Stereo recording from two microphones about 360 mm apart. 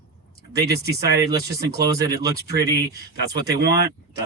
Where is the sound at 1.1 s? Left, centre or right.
Centre.